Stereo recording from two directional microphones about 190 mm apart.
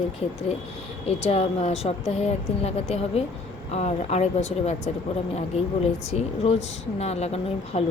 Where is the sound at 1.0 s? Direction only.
35° left (ahead or behind).